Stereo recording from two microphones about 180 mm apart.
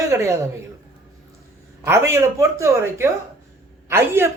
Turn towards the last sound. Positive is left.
turn(degrees=-10)  # may be behind; listen again after turning